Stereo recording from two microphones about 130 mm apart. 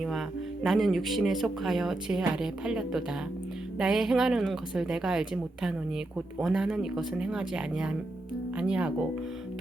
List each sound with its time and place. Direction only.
0.0 s speech: centre (ahead or behind)